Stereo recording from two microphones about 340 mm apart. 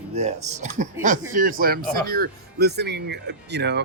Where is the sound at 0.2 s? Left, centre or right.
Centre.